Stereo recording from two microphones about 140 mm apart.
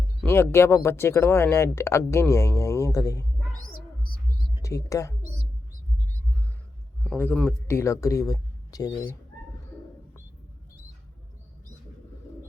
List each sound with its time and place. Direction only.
0.3 s speech: 15° left (ahead or behind)
4.6 s speech: 25° left (ahead or behind)
7.0 s speech: 10° left (ahead or behind)
7.8 s speech: 20° left (ahead or behind)